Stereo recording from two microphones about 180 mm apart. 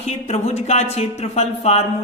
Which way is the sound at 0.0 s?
40° left (ahead or behind).